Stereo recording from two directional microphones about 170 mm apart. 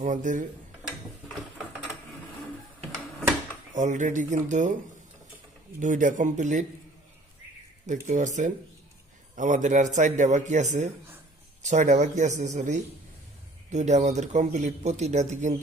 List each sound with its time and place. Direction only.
0.0 s a man's voice: 50° right (ahead or behind)
3.7 s a man's voice: 45° right (ahead or behind)
5.8 s a man's voice: 50° right (ahead or behind)
7.8 s a man's voice: 45° right (ahead or behind)